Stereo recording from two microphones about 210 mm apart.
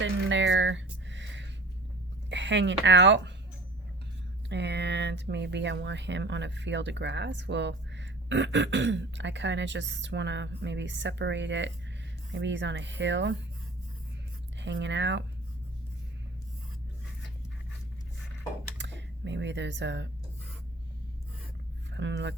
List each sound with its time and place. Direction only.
0.0 s a sound: 60° right (ahead or behind)
2.3 s speech: 60° right (ahead or behind)
4.4 s speech: 55° right (ahead or behind)
14.6 s speech: 60° right (ahead or behind)
18.8 s speech: 60° right (ahead or behind)
21.9 s speech: 60° right (ahead or behind)